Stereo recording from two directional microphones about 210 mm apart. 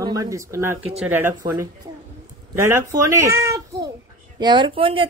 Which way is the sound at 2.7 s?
15° right (ahead or behind).